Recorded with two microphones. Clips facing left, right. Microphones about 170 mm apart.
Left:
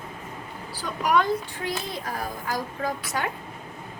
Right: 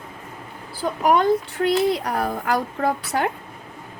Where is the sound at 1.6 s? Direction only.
70° right (ahead or behind).